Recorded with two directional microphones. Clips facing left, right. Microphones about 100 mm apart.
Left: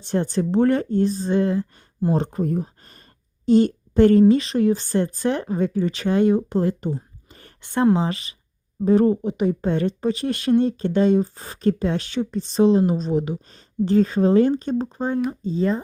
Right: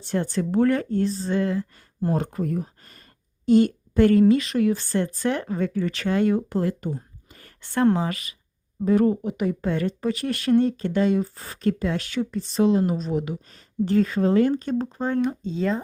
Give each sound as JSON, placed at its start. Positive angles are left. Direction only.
{"t": 0.0, "sound": "speech", "side_deg": 20}
{"t": 15.5, "sound": "speech", "side_deg": 5}